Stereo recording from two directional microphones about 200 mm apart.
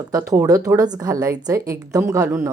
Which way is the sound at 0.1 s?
15° right (ahead or behind).